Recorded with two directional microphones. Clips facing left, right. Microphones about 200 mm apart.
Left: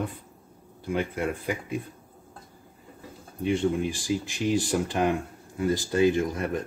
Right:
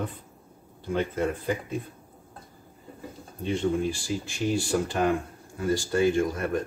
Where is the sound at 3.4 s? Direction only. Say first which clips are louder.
Left 1 dB; 15° left (ahead or behind).